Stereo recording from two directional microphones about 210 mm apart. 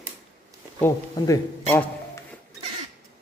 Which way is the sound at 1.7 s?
10° left (ahead or behind).